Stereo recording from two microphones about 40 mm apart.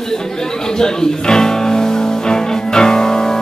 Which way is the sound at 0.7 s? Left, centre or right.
Centre.